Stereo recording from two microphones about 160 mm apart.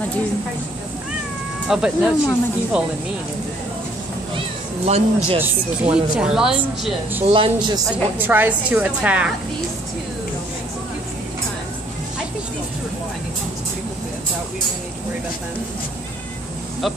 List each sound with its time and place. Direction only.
1.7 s speech: centre (ahead or behind)
4.8 s speech: 40° right (ahead or behind)
5.9 s speech: 5° right (ahead or behind)
7.2 s speech: 35° right (ahead or behind)
7.9 s a woman's voice: 10° right (ahead or behind)